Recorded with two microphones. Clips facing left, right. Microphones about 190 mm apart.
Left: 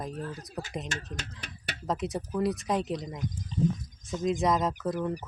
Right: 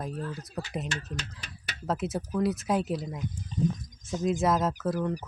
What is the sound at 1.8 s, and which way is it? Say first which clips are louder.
Speech: right 1 dB; 5° right (ahead or behind).